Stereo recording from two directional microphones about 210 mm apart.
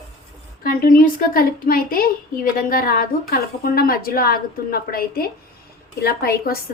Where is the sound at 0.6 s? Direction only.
40° left (ahead or behind).